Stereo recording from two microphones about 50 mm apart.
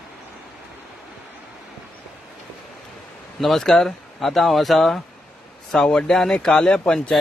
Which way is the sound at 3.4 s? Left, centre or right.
Centre.